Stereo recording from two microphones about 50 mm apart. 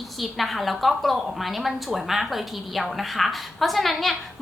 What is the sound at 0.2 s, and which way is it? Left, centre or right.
A woman's voice, centre.